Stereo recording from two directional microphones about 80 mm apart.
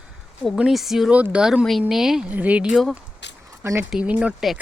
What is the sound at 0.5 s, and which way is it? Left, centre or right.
Speech, centre.